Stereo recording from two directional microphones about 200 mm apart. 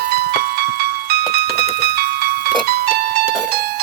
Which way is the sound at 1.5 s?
30° left (ahead or behind).